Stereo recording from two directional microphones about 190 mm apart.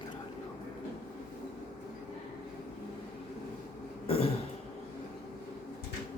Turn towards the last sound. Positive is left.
turn(degrees=30)  # may be behind; listen again after turning